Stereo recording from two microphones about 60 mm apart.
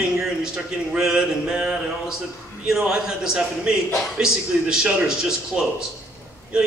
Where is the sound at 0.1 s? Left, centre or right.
Centre.